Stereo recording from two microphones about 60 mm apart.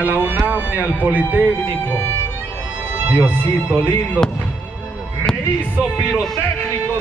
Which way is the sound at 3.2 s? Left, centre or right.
Left.